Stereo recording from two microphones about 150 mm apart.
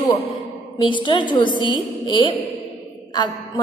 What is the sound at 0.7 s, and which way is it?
A woman's voice, 35° left (ahead or behind).